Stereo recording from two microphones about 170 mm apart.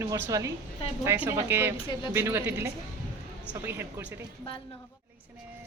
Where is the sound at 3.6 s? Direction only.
15° right (ahead or behind).